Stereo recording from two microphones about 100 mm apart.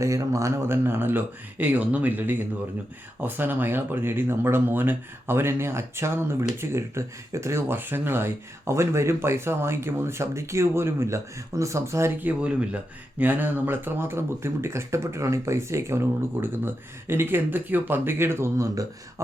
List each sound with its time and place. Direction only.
0.0 s speech: 30° right (ahead or behind)
12.3 s speech: 10° right (ahead or behind); by 18.9 s 35° right (ahead or behind)